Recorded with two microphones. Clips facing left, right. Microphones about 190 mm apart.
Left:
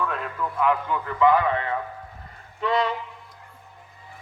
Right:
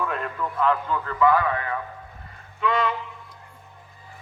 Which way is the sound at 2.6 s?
35° left (ahead or behind).